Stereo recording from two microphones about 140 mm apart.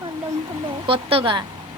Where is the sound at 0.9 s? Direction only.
40° right (ahead or behind).